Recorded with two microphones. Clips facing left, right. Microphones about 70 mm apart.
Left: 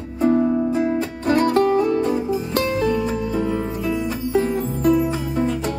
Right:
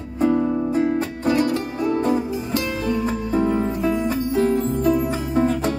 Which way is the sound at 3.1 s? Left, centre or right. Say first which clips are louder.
Right 1 dB; right.